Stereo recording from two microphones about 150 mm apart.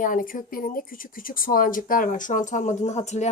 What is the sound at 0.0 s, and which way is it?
A woman's voice, 65° left (ahead or behind).